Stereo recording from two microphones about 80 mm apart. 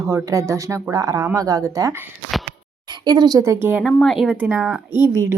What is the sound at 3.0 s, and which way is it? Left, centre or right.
Speech, right.